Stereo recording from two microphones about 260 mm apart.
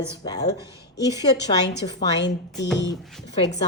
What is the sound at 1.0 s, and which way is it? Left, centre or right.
Speech, centre.